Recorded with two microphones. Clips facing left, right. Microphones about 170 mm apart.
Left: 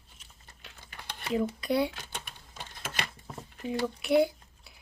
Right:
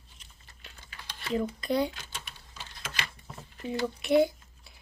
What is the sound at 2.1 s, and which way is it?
Typing, 50° left (ahead or behind).